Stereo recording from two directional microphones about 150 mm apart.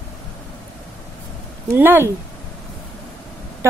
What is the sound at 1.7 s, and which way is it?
Speech, 15° right (ahead or behind).